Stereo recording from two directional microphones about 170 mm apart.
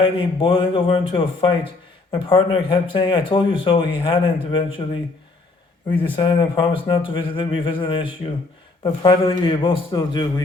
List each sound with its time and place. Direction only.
0.0 s speech: 30° left (ahead or behind)
6.1 s speech: 25° left (ahead or behind)